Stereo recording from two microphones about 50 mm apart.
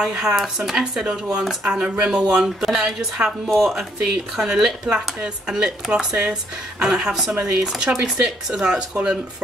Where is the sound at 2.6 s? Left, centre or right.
Centre.